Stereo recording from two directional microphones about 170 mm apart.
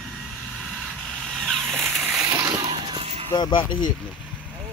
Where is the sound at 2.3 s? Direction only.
20° right (ahead or behind).